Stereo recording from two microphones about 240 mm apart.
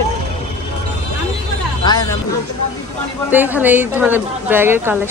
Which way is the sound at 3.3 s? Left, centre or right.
Centre.